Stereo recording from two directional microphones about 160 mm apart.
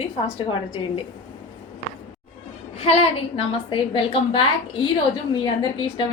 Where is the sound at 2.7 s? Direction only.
40° left (ahead or behind).